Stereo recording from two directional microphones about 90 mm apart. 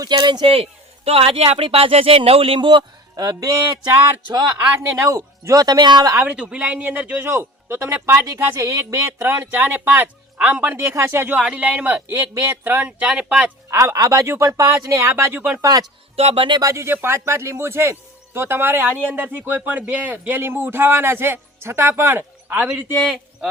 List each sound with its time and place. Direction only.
0.0 s speech: 50° right (ahead or behind)
1.0 s speech: 90° right; by 3.2 s 60° right (ahead or behind)
3.2 s speech: 45° right (ahead or behind)
5.0 s speech: 35° right (ahead or behind); by 6.1 s 50° right (ahead or behind)
6.2 s a man's voice: 15° right (ahead or behind)
11.3 s a man's voice: 10° right (ahead or behind)
13.7 s speech: 30° right (ahead or behind)
15.6 s speech: 45° right (ahead or behind)
16.1 s speech: 90° right
16.6 s speech: 35° right (ahead or behind); by 23.1 s 15° right (ahead or behind)